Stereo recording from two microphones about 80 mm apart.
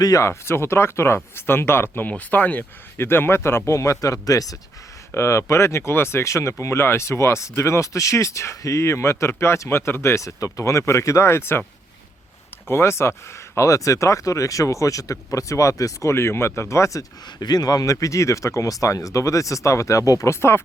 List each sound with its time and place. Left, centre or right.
0.0 s speech: left
0.3 s speech: left
5.1 s speech: left
12.6 s speech: left
17.4 s speech: left